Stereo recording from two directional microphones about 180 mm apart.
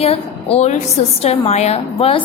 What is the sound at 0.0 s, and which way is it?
A woman's voice, 35° left (ahead or behind).